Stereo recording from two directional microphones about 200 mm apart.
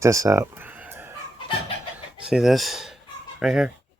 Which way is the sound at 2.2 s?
Centre (ahead or behind).